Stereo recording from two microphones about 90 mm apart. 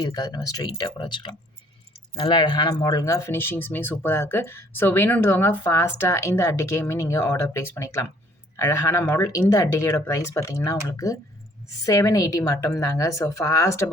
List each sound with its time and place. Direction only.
0.0 s speech: 45° left (ahead or behind)
0.9 s speech: 60° left (ahead or behind); by 3.3 s 35° left (ahead or behind)
3.3 s speech: 25° left (ahead or behind)